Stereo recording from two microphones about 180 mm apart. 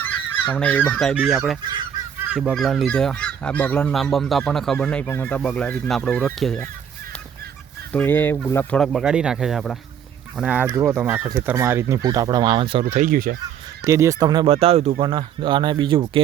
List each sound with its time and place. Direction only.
0.0 s goose: 10° left (ahead or behind)
1.1 s fowl: 5° right (ahead or behind)
7.9 s speech: 10° left (ahead or behind)
8.8 s fowl: centre (ahead or behind)
10.3 s speech: 5° right (ahead or behind); by 12.8 s 30° right (ahead or behind)
12.9 s speech: 50° right (ahead or behind)
13.8 s speech: 15° right (ahead or behind)